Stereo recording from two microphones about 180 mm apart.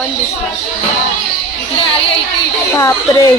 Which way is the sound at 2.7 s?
15° left (ahead or behind).